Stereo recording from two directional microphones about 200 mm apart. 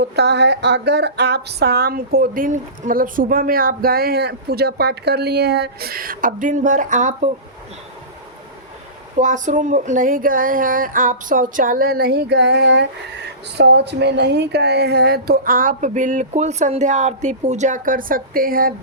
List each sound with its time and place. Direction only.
0.0 s speech: 55° right (ahead or behind); by 7.3 s 40° right (ahead or behind)
9.1 s speech: 40° right (ahead or behind)